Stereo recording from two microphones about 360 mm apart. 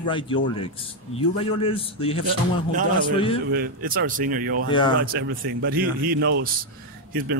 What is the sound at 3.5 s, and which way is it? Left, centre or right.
A man's voice, right.